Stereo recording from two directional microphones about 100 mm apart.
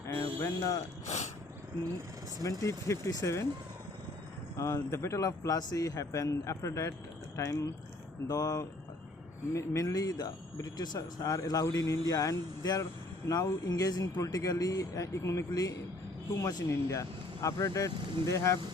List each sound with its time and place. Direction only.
0.1 s a sound: 25° left (ahead or behind)
2.4 s speech: 35° left (ahead or behind)
4.5 s speech: 30° left (ahead or behind)